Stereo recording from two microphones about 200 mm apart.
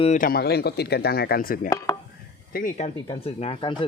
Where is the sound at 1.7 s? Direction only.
15° left (ahead or behind).